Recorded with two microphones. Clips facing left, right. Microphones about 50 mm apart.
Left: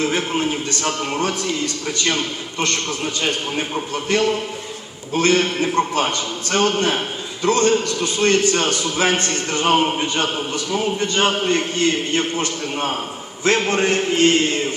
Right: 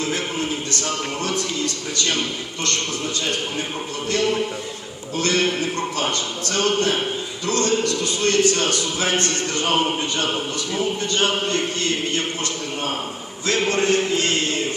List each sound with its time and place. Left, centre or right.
0.0 s a man's voice: left
5.1 s a man's voice: left